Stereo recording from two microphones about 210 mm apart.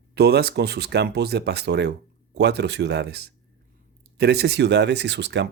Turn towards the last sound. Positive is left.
turn(degrees=-55)  # may be behind; listen again after turning